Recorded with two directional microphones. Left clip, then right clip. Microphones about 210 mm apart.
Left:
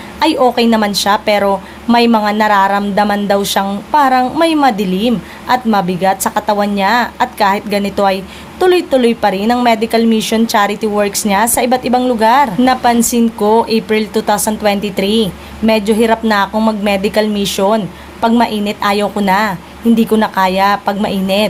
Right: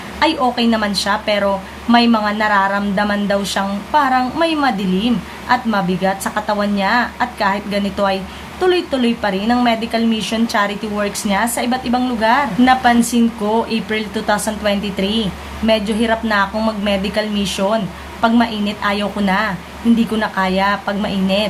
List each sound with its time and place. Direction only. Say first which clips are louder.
0.2 s a woman's voice: left 5 dB; 50° left (ahead or behind)